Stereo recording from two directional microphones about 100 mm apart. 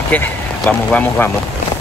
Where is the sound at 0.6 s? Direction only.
15° left (ahead or behind).